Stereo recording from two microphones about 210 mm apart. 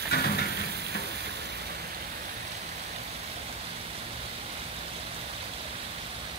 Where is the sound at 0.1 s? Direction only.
50° left (ahead or behind).